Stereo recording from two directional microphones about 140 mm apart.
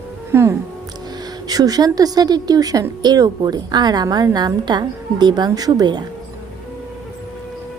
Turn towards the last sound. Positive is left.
turn(degrees=-30)  # may be behind; listen again after turning